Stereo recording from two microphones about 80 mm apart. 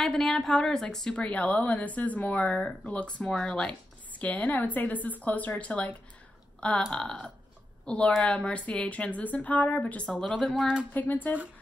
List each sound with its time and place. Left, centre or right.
0.0 s a woman's voice: centre
10.9 s a woman's voice: left